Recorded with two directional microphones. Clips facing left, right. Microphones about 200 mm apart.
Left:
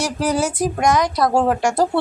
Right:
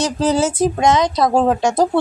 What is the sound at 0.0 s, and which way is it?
Speech, 25° right (ahead or behind).